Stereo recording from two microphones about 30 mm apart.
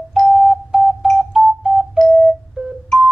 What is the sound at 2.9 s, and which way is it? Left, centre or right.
Music, centre.